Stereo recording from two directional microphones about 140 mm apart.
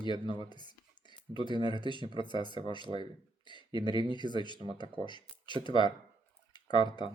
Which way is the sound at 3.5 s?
35° left (ahead or behind).